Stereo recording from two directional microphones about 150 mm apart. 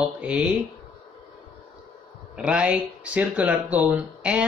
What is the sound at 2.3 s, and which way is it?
Speech, 5° right (ahead or behind).